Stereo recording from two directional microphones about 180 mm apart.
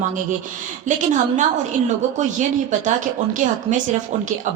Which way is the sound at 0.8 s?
45° right (ahead or behind).